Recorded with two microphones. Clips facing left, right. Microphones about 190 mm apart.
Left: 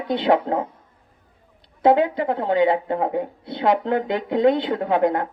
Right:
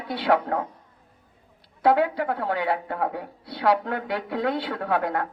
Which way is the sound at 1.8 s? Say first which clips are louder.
Left 4 dB; 20° left (ahead or behind).